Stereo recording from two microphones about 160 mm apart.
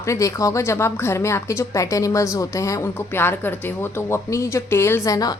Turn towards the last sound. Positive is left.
turn(degrees=20)  # may be behind; listen again after turning